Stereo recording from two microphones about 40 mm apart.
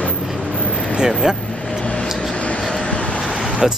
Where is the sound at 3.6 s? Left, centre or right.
Centre.